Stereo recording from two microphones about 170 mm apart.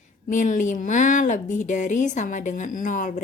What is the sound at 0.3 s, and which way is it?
Speech, 50° left (ahead or behind).